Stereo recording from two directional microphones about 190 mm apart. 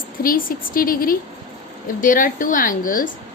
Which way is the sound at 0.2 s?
50° left (ahead or behind).